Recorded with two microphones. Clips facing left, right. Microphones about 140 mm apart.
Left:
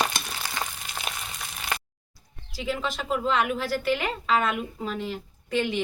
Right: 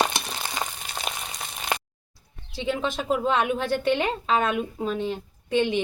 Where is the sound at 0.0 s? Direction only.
25° right (ahead or behind).